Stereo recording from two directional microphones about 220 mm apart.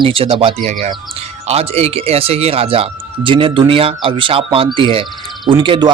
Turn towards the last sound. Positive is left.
turn(degrees=-20)  # may be behind; listen again after turning